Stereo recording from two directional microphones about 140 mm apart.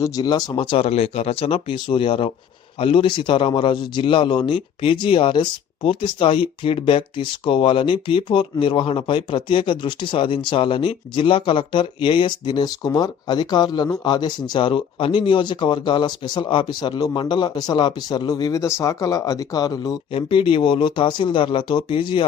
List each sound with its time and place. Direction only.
0.0 s a man's voice: 30° left (ahead or behind)
20.1 s a man's voice: 40° left (ahead or behind)